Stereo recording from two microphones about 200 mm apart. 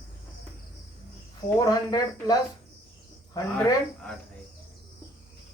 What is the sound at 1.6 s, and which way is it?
Speech, 20° left (ahead or behind).